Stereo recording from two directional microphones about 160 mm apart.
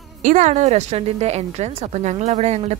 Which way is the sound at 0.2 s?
50° right (ahead or behind).